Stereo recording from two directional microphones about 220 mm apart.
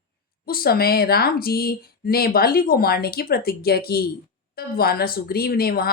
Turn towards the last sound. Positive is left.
turn(degrees=45)  # may be behind; listen again after turning